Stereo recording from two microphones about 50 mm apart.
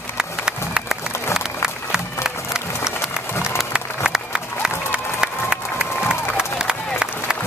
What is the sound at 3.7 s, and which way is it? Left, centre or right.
Crowd, centre.